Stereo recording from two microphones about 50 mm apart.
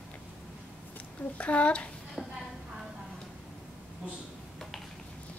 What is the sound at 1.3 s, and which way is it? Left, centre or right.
Speech, left.